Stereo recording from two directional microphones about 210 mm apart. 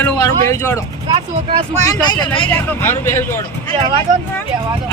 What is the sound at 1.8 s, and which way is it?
Speech, 20° left (ahead or behind).